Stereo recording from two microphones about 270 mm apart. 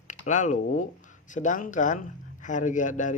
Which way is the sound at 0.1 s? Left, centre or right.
Left.